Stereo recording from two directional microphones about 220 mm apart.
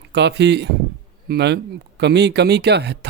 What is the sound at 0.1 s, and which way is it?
Speech, 50° right (ahead or behind).